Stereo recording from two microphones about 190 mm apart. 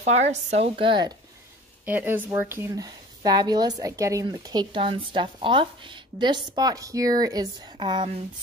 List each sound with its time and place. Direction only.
0.0 s a woman's voice: 35° right (ahead or behind)
1.9 s speech: 10° right (ahead or behind)